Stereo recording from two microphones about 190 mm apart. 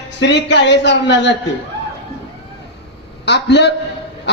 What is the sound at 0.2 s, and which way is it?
A man's voice, 65° left (ahead or behind).